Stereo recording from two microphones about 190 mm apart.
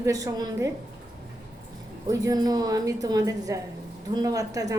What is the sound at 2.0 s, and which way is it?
A woman's voice, 20° right (ahead or behind).